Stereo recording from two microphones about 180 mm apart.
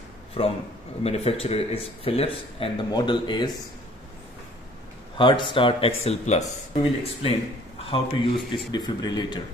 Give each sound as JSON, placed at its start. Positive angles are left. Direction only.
{"t": 0.4, "sound": "speech", "side_deg": 30}
{"t": 5.1, "sound": "a man's voice", "side_deg": 25}